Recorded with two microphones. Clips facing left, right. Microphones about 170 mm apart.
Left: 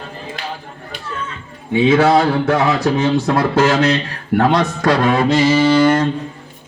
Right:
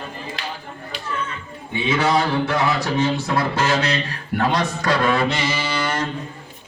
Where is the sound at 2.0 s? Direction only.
55° left (ahead or behind).